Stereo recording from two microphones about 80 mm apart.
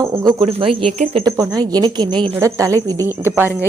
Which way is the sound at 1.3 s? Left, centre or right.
Right.